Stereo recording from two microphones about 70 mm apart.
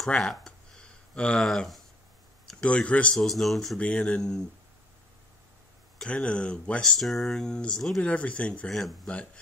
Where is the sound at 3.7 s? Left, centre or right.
Centre.